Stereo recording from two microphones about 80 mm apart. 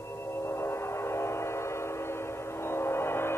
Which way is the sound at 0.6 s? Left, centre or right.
Left.